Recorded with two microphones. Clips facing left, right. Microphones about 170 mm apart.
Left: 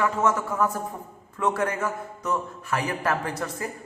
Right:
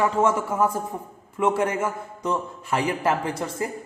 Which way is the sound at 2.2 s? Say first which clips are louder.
Right 2 dB; 25° right (ahead or behind).